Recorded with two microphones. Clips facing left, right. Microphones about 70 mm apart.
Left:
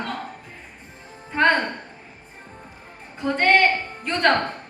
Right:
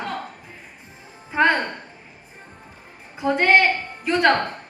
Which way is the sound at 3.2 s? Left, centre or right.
Centre.